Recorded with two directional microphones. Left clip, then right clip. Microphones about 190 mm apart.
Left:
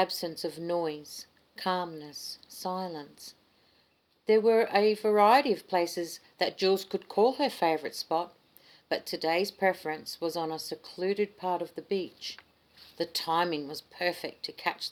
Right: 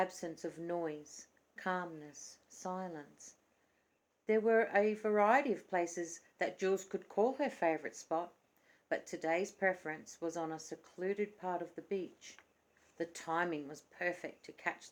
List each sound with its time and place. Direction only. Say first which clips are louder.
0.0 s speech: left 8 dB; 35° left (ahead or behind)
4.3 s speech: left 8 dB; 40° left (ahead or behind)